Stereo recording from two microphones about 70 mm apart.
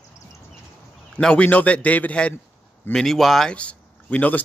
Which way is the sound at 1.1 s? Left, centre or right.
Centre.